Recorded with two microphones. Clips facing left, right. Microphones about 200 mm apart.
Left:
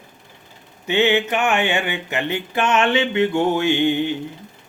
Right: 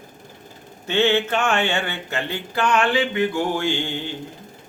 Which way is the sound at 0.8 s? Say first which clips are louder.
Left 1 dB; 15° left (ahead or behind).